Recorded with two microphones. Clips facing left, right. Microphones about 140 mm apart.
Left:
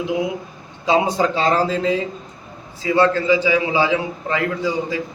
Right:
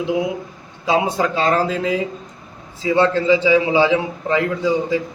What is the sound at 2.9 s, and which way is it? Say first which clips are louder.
A man's voice: right 1 dB; 25° right (ahead or behind).